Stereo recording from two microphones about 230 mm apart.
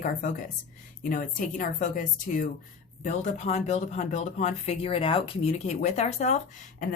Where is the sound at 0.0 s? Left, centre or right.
Left.